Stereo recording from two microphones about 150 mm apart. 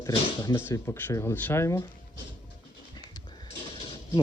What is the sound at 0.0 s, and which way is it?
Speech, 25° left (ahead or behind).